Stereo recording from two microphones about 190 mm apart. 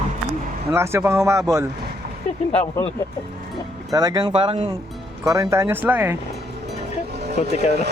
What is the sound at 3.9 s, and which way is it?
Speech, 20° right (ahead or behind).